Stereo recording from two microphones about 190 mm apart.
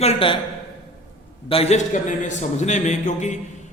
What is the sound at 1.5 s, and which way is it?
A man's voice, 35° left (ahead or behind).